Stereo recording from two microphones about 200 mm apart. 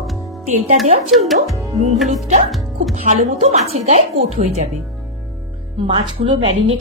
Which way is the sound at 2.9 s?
35° right (ahead or behind).